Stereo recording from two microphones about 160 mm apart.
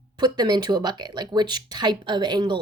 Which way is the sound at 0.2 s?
25° right (ahead or behind).